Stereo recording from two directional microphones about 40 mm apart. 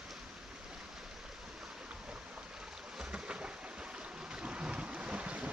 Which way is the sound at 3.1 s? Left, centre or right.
Right.